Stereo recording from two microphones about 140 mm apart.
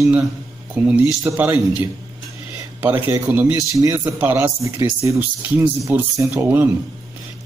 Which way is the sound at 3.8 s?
25° right (ahead or behind).